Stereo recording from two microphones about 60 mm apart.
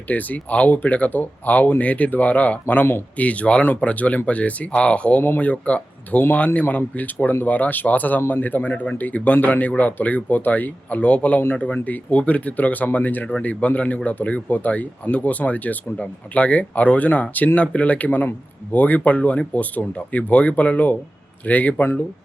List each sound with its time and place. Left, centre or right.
0.1 s speech: left